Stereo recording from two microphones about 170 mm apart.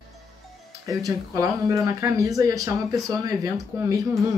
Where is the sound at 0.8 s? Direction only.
20° right (ahead or behind).